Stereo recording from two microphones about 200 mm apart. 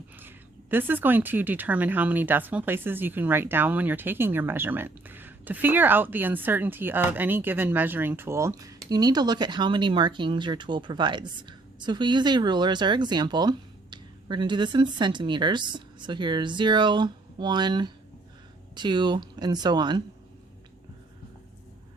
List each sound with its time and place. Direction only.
0.2 s speech: 10° right (ahead or behind)